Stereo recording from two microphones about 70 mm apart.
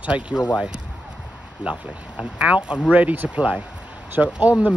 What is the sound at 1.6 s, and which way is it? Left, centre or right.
Speech, centre.